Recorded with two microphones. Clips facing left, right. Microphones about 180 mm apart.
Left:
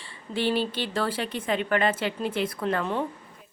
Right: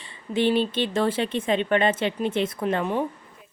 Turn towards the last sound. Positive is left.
turn(degrees=-15)  # may be behind; listen again after turning